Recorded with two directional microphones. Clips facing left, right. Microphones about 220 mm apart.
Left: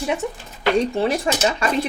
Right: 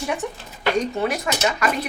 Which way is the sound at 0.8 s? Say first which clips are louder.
Left 3 dB; 30° left (ahead or behind).